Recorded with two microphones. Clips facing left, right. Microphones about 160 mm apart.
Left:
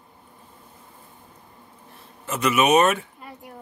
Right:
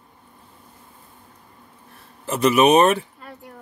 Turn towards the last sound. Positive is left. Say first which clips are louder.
# right 3 dB
turn(degrees=-35)  # may be behind; listen again after turning